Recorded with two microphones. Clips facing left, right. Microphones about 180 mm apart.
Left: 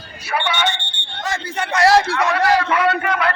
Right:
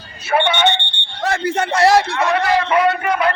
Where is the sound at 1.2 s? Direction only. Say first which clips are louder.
Right 6 dB; 60° right (ahead or behind).